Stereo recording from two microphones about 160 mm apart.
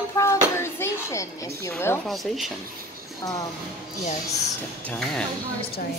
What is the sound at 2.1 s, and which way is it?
Speech, centre (ahead or behind).